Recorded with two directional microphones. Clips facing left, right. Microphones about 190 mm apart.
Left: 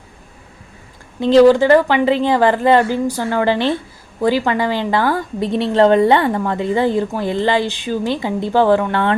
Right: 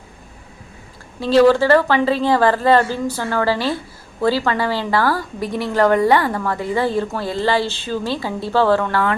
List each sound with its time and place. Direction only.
1.2 s a woman's voice: 15° left (ahead or behind)